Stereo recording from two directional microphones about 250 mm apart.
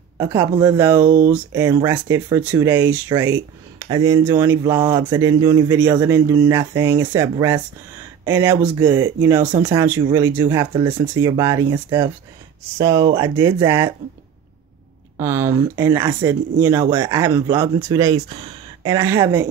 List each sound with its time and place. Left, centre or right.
0.2 s speech: centre
15.1 s speech: centre